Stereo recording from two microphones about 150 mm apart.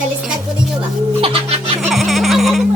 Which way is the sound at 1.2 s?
40° right (ahead or behind).